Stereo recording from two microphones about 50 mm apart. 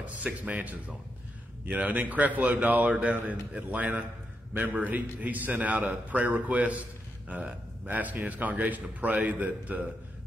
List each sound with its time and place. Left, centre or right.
0.0 s a man's voice: right